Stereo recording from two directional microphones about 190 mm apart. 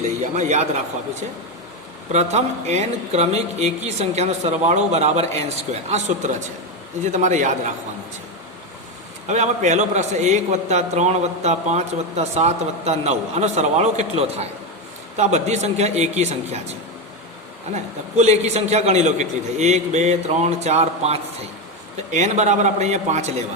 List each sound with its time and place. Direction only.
0.2 s speech: 40° right (ahead or behind)
2.1 s a man's voice: 35° right (ahead or behind)
9.2 s a man's voice: 40° right (ahead or behind)
18.2 s a man's voice: 35° right (ahead or behind)